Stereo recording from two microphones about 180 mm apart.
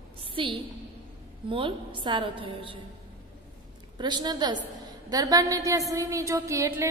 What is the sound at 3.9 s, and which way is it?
A woman's voice, 25° right (ahead or behind).